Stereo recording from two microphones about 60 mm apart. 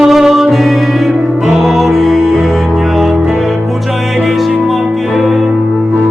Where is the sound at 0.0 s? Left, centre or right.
Centre.